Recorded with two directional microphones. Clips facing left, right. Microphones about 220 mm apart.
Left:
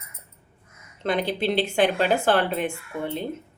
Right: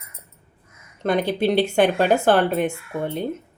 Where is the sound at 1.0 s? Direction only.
50° right (ahead or behind).